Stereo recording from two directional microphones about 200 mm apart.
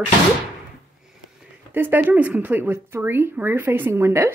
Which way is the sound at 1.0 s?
5° right (ahead or behind).